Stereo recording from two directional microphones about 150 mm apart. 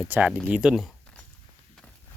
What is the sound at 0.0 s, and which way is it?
Speech, 10° right (ahead or behind).